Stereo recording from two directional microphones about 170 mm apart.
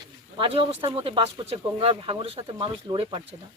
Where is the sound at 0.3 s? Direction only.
30° right (ahead or behind).